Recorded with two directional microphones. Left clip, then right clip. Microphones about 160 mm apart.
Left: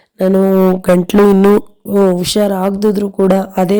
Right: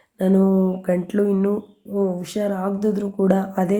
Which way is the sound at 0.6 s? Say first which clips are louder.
Left 11 dB; 70° left (ahead or behind).